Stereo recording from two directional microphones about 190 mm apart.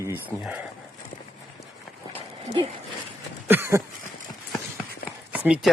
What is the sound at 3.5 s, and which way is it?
Speech, 10° right (ahead or behind).